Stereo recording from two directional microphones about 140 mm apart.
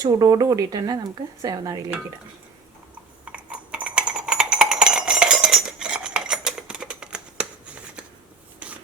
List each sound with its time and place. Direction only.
0.0 s speech: 25° right (ahead or behind)
3.2 s a sound: 10° right (ahead or behind)
8.6 s filing: 10° right (ahead or behind)